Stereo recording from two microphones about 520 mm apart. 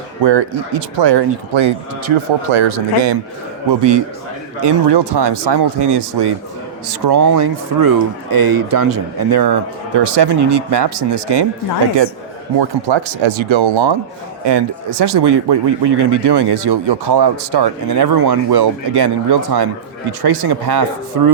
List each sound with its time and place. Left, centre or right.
0.2 s speech: right
3.7 s speech: right
12.5 s speech: right